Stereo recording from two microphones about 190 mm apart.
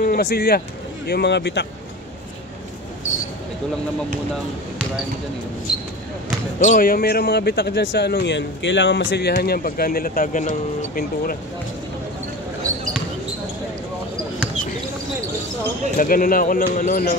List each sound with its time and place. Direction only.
0.0 s speech: 50° left (ahead or behind)
6.6 s speech: 45° left (ahead or behind)
16.0 s speech: 45° left (ahead or behind)